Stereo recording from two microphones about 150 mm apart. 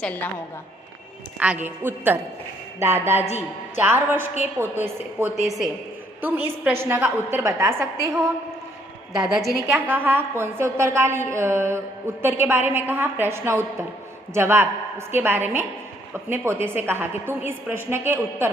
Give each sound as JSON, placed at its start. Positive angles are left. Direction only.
{"t": 0.0, "sound": "a woman's voice", "side_deg": 10}
{"t": 1.4, "sound": "a woman's voice", "side_deg": -10}
{"t": 9.1, "sound": "a woman's voice", "side_deg": -5}
{"t": 9.7, "sound": "a woman's voice", "side_deg": -15}